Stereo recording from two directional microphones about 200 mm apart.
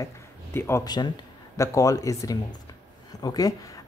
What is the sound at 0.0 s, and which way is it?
A man's voice, 10° left (ahead or behind).